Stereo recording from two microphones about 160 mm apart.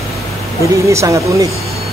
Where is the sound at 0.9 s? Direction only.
20° right (ahead or behind).